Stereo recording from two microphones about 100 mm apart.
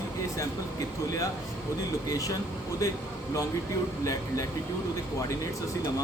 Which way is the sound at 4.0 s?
35° left (ahead or behind).